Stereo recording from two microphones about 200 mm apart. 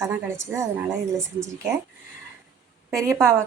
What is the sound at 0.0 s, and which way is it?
Speech, 15° right (ahead or behind).